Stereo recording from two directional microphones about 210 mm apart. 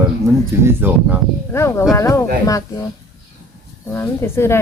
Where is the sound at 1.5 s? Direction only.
15° left (ahead or behind).